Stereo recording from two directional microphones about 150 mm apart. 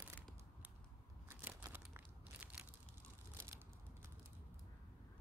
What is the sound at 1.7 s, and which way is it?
Crumpling, 10° right (ahead or behind).